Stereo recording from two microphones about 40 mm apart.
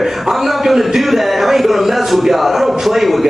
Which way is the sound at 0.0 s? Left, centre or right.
Centre.